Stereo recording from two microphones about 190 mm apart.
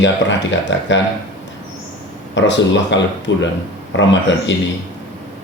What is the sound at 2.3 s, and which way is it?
Speech, 70° left (ahead or behind).